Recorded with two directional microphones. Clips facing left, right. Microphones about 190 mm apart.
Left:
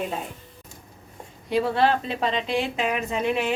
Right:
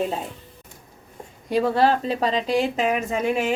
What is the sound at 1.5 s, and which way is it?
A woman's voice, 40° right (ahead or behind).